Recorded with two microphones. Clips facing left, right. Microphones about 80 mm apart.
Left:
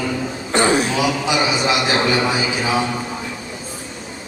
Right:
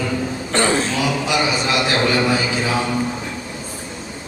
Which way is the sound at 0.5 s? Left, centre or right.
Centre.